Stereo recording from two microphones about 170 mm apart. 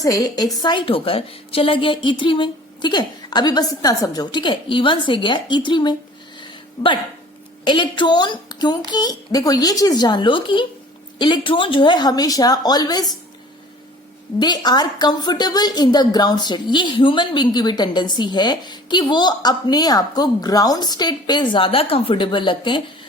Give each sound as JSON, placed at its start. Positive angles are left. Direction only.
{"t": 0.0, "sound": "a woman's voice", "side_deg": 20}
{"t": 6.4, "sound": "a sound", "side_deg": 30}
{"t": 7.6, "sound": "a woman's voice", "side_deg": 30}
{"t": 14.3, "sound": "a woman's voice", "side_deg": 25}